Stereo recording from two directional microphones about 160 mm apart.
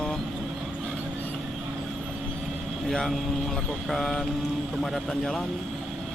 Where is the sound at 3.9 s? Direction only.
Centre (ahead or behind).